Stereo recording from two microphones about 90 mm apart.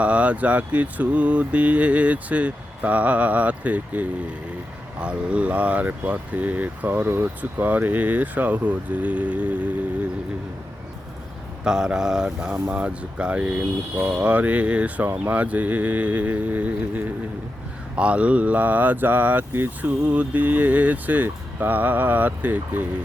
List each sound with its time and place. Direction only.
0.0 s speech: 15° right (ahead or behind)
11.6 s speech: 10° right (ahead or behind)